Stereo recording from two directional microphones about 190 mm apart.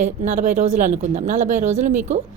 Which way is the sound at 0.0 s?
40° right (ahead or behind).